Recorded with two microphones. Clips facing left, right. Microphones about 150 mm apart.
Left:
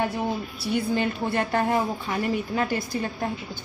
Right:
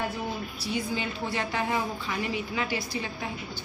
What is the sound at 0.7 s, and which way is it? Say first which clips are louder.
A woman's voice: left 7 dB; 60° left (ahead or behind).